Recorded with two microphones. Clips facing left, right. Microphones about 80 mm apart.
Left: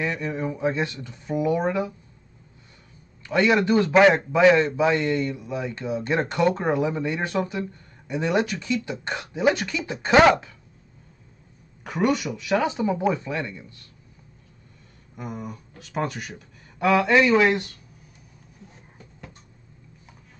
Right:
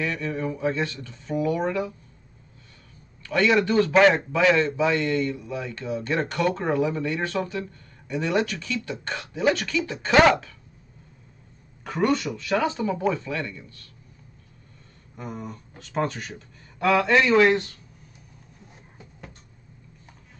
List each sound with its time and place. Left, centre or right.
0.0 s a man's voice: centre
3.3 s a man's voice: centre
11.8 s a man's voice: centre
15.1 s speech: centre